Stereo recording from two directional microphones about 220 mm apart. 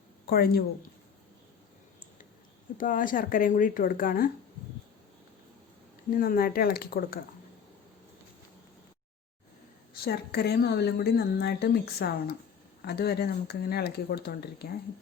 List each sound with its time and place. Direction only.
0.3 s a woman's voice: 45° left (ahead or behind)
2.7 s speech: 35° left (ahead or behind)
6.1 s speech: 40° left (ahead or behind)
10.0 s a woman's voice: 45° left (ahead or behind)